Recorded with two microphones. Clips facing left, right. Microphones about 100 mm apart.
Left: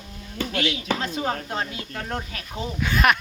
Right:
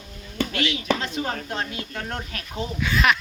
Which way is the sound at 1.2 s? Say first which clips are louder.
Left 2 dB; 10° left (ahead or behind).